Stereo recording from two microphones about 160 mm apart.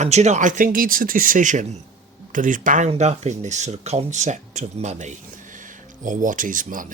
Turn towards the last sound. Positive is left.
turn(degrees=-55)  # may be behind; listen again after turning